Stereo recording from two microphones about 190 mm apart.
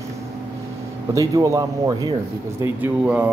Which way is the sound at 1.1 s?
20° right (ahead or behind).